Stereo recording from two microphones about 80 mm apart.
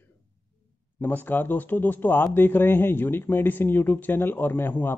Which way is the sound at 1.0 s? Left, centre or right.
Left.